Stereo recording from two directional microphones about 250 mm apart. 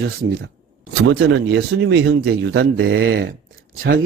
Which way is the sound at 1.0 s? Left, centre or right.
Right.